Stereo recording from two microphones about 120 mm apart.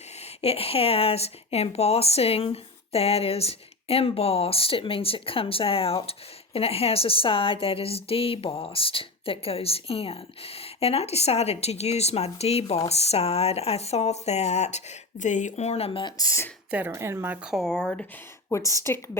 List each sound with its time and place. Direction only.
0.4 s a woman's voice: 55° left (ahead or behind)
15.2 s a woman's voice: 90° left; by 16.1 s 45° left (ahead or behind)
16.1 s a woman's voice: 25° left (ahead or behind)
16.7 s speech: 20° right (ahead or behind)
17.5 s speech: 5° left (ahead or behind)
18.4 s a woman's voice: 25° left (ahead or behind)